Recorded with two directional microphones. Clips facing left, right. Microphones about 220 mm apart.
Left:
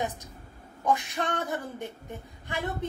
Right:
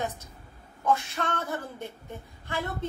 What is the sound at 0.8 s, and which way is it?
A woman's voice, 15° left (ahead or behind).